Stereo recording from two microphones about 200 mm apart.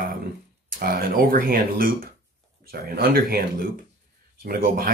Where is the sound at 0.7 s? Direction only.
50° right (ahead or behind).